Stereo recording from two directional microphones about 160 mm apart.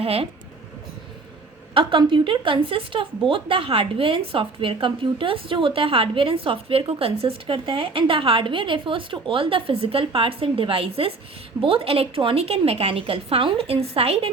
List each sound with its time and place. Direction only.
0.0 s speech: 35° right (ahead or behind)
1.7 s a woman's voice: 30° right (ahead or behind)